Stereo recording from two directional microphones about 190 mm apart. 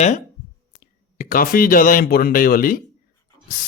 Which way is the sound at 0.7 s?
50° left (ahead or behind).